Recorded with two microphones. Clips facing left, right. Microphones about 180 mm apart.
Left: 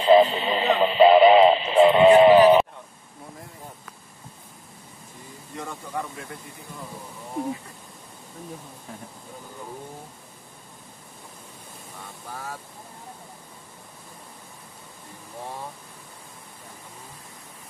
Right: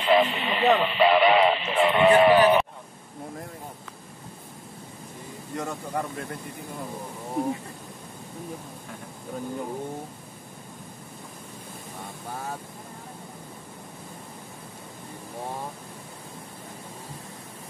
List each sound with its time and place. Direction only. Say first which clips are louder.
0.0 s radio: left 5 dB; 30° left (ahead or behind)
5.6 s speech: right 2 dB; 40° right (ahead or behind)